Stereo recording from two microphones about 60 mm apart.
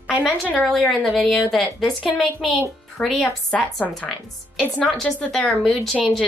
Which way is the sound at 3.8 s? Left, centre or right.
Centre.